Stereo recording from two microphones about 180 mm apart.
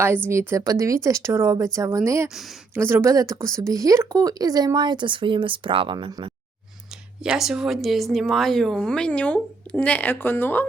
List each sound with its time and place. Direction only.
0.3 s speech: 15° right (ahead or behind)
2.3 s speech: centre (ahead or behind)
2.7 s speech: 15° right (ahead or behind)
7.2 s speech: 5° right (ahead or behind)